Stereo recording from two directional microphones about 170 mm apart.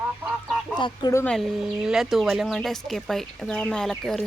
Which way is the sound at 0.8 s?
20° left (ahead or behind).